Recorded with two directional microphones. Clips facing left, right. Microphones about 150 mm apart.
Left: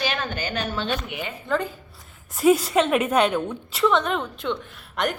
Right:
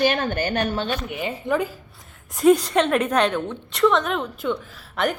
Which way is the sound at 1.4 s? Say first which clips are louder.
Right 2 dB; 10° right (ahead or behind).